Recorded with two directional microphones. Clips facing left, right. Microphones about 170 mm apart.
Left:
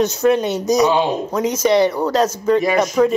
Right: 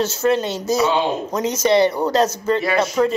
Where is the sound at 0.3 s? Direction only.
15° left (ahead or behind).